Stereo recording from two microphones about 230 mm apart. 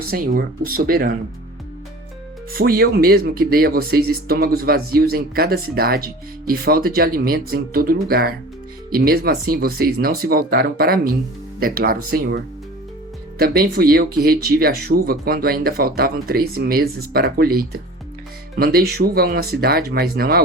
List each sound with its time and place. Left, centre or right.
0.1 s speech: right
2.5 s speech: right
13.4 s speech: right